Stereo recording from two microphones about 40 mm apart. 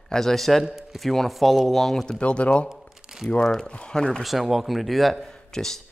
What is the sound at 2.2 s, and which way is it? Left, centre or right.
Speech, left.